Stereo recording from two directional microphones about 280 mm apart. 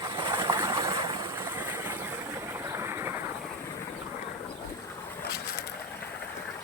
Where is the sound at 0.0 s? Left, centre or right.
Centre.